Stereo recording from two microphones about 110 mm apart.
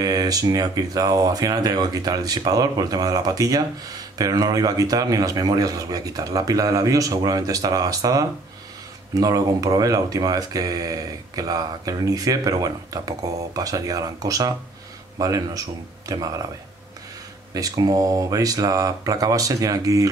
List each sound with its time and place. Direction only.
0.0 s speech: 35° right (ahead or behind)
17.6 s speech: 35° right (ahead or behind)